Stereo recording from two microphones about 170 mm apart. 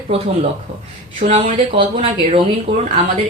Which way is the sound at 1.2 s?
50° right (ahead or behind).